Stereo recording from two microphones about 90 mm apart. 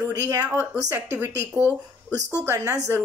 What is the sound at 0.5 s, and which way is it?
Speech, 25° right (ahead or behind).